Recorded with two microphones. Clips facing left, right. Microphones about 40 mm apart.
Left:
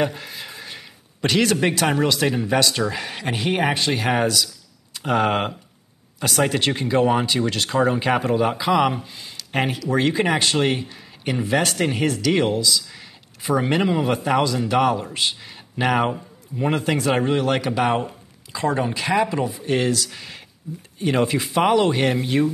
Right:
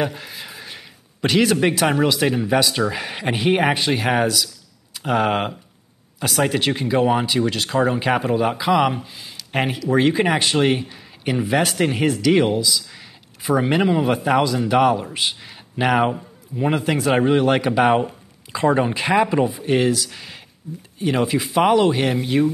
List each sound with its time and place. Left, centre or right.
0.0 s speech: centre; by 19.5 s right
19.5 s speech: centre